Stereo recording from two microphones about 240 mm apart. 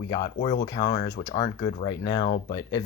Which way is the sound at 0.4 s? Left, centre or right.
Centre.